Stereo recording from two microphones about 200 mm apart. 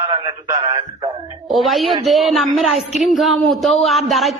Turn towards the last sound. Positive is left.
turn(degrees=0)  # may be behind; listen again after turning